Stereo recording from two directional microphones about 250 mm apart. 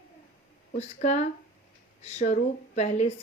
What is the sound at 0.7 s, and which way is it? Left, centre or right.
A woman's voice, left.